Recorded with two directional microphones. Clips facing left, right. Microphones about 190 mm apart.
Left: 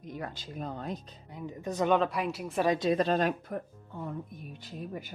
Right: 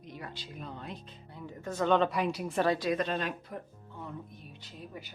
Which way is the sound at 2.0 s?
Centre (ahead or behind).